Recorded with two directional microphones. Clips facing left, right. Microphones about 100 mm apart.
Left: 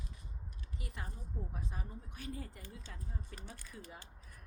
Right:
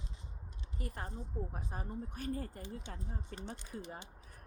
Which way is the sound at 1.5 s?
45° right (ahead or behind).